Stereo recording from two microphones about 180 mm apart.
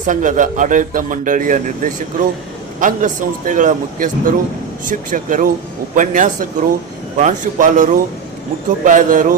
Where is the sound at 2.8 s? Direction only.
45° right (ahead or behind).